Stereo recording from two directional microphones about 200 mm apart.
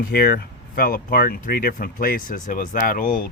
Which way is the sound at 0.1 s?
50° left (ahead or behind).